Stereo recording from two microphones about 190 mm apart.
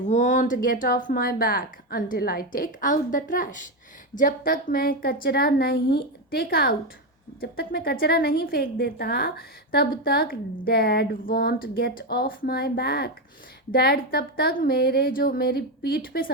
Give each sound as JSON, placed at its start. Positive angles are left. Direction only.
{"t": 0.0, "sound": "speech", "side_deg": 40}